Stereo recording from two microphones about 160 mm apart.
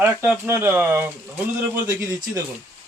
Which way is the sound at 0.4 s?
15° right (ahead or behind).